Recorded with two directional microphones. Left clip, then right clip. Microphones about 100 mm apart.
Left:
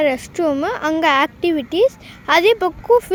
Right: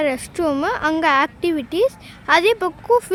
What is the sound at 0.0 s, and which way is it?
Speech, centre (ahead or behind).